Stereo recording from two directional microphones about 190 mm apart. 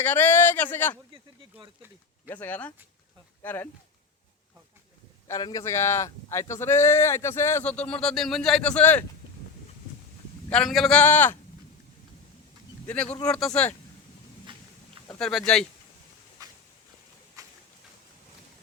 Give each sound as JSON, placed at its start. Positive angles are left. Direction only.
{"t": 0.0, "sound": "speech", "side_deg": 10}
{"t": 1.1, "sound": "a sound", "side_deg": -25}
{"t": 2.2, "sound": "speech", "side_deg": 10}
{"t": 5.3, "sound": "speech", "side_deg": 20}
{"t": 10.5, "sound": "a man's voice", "side_deg": 0}
{"t": 13.2, "sound": "a man's voice", "side_deg": 5}
{"t": 15.2, "sound": "a man's voice", "side_deg": 0}
{"t": 16.4, "sound": "a sound", "side_deg": -20}